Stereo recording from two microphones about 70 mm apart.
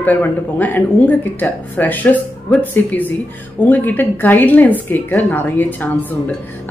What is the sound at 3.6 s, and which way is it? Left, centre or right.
A woman's voice, left.